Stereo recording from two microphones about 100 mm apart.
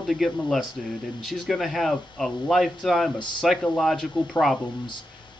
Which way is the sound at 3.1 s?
50° left (ahead or behind).